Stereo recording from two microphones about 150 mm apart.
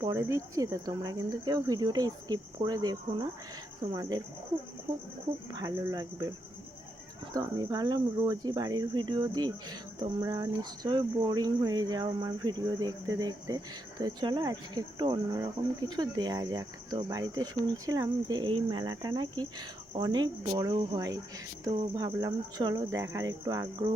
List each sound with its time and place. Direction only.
0.1 s speech: 20° right (ahead or behind)
5.5 s speech: 25° right (ahead or behind)
7.3 s speech: 25° right (ahead or behind)